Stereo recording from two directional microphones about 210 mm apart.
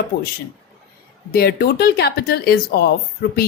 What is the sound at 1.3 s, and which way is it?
A woman's voice, 50° left (ahead or behind).